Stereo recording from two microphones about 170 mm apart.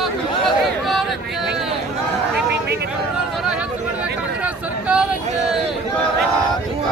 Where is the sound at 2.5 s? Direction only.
70° right (ahead or behind).